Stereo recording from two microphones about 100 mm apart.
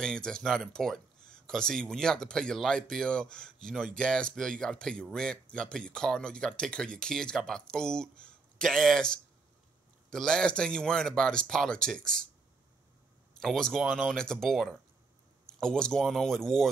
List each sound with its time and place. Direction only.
0.0 s speech: 5° left (ahead or behind)
13.4 s speech: 5° left (ahead or behind)